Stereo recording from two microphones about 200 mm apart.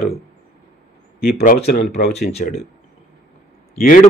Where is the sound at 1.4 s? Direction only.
45° left (ahead or behind).